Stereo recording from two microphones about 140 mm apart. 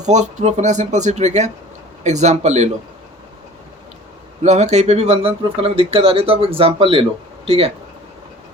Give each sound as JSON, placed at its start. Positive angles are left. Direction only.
{"t": 0.0, "sound": "speech", "side_deg": -60}
{"t": 4.4, "sound": "speech", "side_deg": -55}